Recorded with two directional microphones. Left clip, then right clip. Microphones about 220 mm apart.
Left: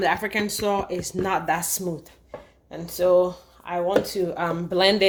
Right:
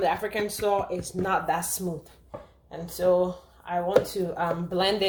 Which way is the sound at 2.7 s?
45° left (ahead or behind).